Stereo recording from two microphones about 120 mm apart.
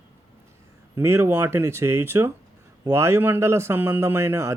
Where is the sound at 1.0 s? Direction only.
20° right (ahead or behind).